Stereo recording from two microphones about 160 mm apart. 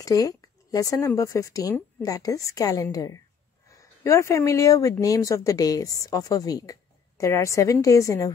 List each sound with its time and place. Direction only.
0.0 s a woman's voice: 20° left (ahead or behind)